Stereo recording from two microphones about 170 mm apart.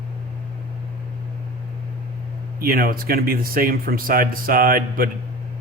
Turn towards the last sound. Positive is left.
turn(degrees=-60)  # may be behind; listen again after turning